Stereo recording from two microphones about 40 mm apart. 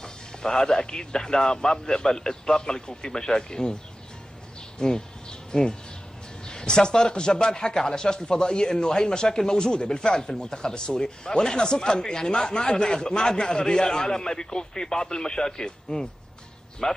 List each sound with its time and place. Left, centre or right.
0.0 s a man's voice: centre
4.7 s a man's voice: centre